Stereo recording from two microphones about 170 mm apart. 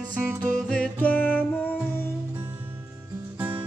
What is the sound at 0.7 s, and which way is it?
Music, 10° left (ahead or behind).